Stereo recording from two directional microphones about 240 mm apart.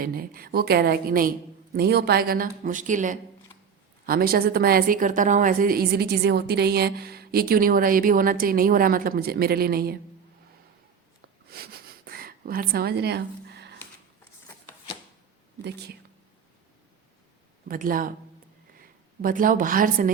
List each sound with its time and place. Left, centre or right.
0.0 s a woman's voice: right
11.5 s a sound: right
17.7 s a woman's voice: right